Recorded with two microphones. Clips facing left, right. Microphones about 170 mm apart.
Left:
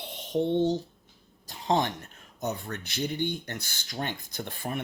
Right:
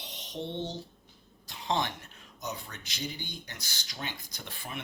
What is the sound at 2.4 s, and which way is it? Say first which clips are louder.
Speech: left 7 dB; 55° left (ahead or behind).